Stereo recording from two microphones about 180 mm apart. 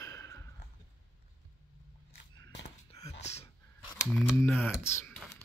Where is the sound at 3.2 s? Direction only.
35° left (ahead or behind).